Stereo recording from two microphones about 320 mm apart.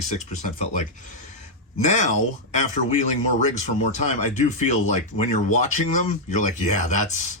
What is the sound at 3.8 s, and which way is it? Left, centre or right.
Speech, left.